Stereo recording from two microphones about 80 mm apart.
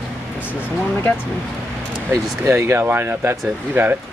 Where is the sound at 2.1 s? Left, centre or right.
Right.